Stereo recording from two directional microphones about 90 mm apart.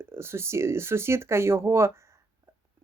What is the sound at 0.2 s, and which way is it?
Speech, 30° right (ahead or behind).